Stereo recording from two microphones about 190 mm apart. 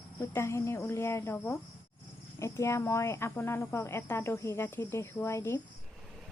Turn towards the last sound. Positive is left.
turn(degrees=15)  # may be behind; listen again after turning